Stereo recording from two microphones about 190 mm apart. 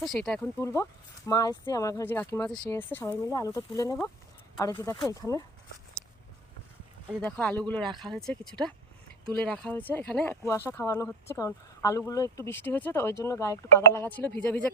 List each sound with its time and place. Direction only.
0.0 s speech: centre (ahead or behind)
0.6 s speech: 15° left (ahead or behind)
7.2 s speech: 5° left (ahead or behind)